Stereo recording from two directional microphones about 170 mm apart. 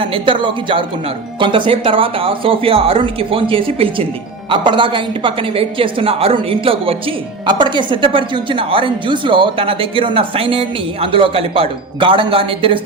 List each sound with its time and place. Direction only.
0.0 s speech: 30° right (ahead or behind)